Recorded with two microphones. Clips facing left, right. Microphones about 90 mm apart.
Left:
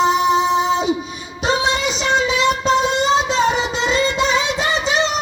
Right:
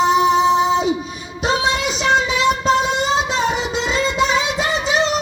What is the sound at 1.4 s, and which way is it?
Music, 5° right (ahead or behind).